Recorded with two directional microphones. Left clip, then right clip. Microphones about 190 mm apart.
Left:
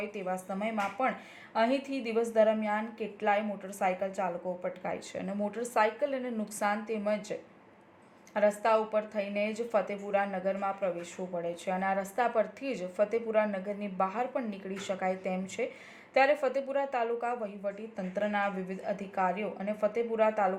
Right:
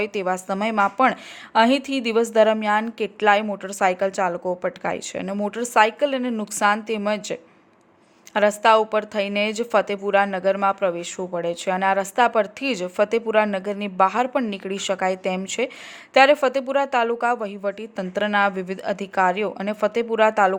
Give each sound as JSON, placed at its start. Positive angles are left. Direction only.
{"t": 0.0, "sound": "a woman's voice", "side_deg": -45}